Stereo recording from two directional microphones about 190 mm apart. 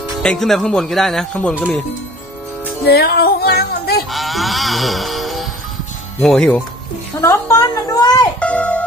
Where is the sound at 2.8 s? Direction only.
55° left (ahead or behind).